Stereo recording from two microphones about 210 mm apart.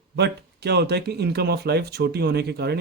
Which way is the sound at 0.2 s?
50° right (ahead or behind).